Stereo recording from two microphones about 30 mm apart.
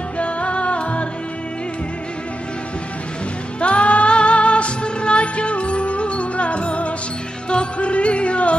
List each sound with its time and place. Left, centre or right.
0.2 s music: left
3.6 s music: left